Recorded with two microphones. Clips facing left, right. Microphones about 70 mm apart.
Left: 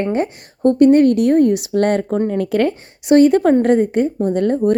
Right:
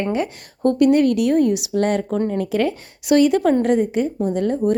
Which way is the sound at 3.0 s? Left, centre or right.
Left.